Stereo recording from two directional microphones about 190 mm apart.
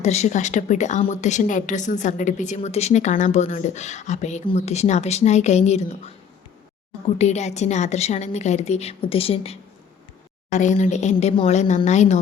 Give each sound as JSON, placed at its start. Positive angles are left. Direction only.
{"t": 0.0, "sound": "a woman's voice", "side_deg": 35}
{"t": 7.2, "sound": "a woman's voice", "side_deg": 35}